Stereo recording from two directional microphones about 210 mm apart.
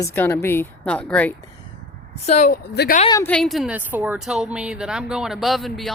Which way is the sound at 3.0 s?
20° left (ahead or behind).